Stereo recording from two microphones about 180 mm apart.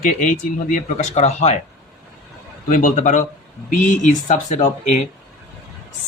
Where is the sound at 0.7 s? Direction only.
40° left (ahead or behind).